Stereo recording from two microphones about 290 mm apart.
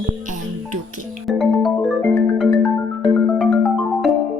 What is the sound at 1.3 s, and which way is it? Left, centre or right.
Music, centre.